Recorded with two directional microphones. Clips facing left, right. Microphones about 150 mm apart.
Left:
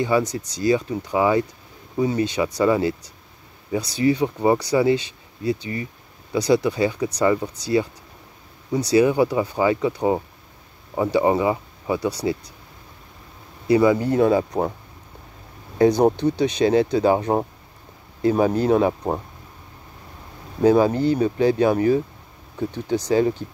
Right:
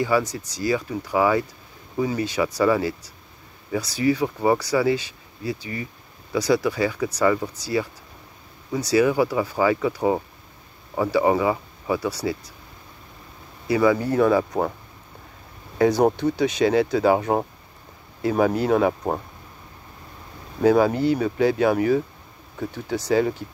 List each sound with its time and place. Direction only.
0.0 s speech: 20° left (ahead or behind)
13.7 s speech: 25° left (ahead or behind)
15.8 s speech: 20° left (ahead or behind)
20.6 s speech: 25° left (ahead or behind)
20.9 s speech: 15° right (ahead or behind)
21.2 s speech: 25° left (ahead or behind)